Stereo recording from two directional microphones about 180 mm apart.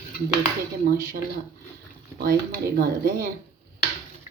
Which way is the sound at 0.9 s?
50° right (ahead or behind).